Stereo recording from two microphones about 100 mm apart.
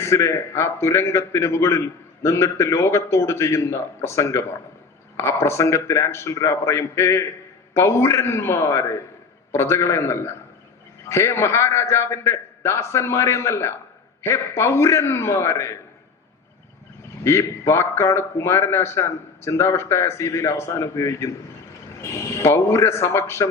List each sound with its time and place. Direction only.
0.0 s a man's voice: 30° left (ahead or behind)
17.2 s a man's voice: 25° left (ahead or behind)